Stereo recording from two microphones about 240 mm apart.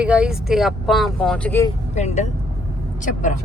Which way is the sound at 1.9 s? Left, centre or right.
Left.